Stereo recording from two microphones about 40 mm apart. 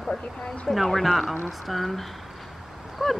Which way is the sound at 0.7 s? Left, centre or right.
Centre.